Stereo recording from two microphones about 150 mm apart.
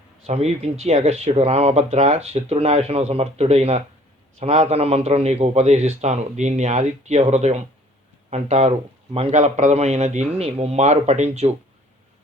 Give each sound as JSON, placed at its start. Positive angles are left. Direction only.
{"t": 0.3, "sound": "speech", "side_deg": -45}